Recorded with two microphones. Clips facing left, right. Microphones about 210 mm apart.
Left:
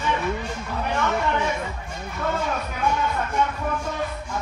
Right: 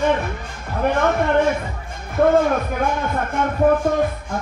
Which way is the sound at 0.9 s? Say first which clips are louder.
Right 6 dB; 55° right (ahead or behind).